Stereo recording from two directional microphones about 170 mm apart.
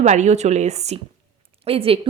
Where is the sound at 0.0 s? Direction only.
45° right (ahead or behind).